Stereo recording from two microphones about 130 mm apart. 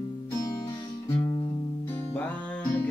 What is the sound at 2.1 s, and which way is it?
Music, 10° left (ahead or behind).